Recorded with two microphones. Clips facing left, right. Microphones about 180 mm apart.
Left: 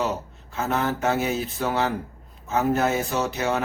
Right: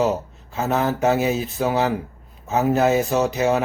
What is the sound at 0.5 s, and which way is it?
Speech, 15° right (ahead or behind).